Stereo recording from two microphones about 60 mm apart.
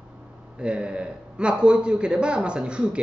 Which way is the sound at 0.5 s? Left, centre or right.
Centre.